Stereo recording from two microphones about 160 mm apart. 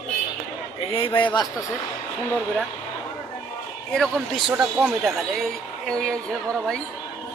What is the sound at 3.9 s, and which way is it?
Speech, 5° left (ahead or behind).